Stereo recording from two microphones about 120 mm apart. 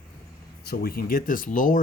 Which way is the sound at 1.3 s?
90° left.